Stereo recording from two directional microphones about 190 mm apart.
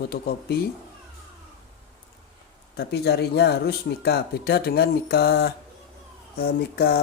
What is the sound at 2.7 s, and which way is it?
Speech, 60° left (ahead or behind).